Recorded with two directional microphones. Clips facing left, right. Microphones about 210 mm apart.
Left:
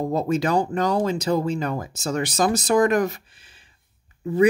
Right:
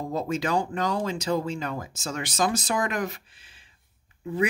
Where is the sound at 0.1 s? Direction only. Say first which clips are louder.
Left 3 dB; 40° left (ahead or behind).